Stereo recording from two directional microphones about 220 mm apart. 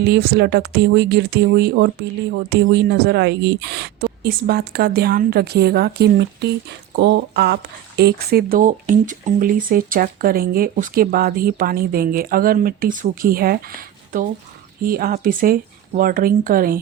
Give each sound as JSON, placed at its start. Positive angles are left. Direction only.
{"t": 0.0, "sound": "speech", "side_deg": -45}